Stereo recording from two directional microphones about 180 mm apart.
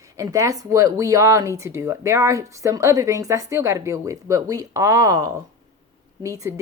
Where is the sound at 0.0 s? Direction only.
15° right (ahead or behind).